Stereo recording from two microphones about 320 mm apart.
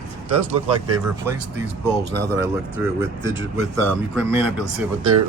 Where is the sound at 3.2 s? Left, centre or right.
Right.